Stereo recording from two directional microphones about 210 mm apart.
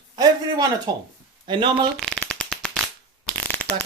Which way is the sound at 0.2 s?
20° right (ahead or behind).